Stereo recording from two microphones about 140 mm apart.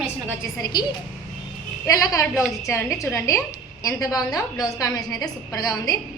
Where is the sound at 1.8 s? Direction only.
25° left (ahead or behind).